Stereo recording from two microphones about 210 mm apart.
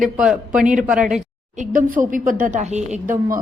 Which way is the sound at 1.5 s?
40° right (ahead or behind).